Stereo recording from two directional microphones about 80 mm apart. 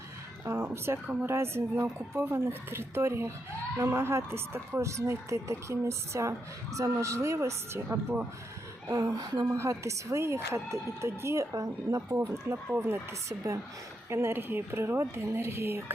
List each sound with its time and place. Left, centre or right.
0.4 s a sound: right
1.0 s a woman's voice: centre
1.3 s a woman's voice: right
8.9 s a woman's voice: right